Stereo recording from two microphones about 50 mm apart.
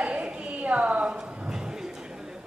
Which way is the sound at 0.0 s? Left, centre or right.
Right.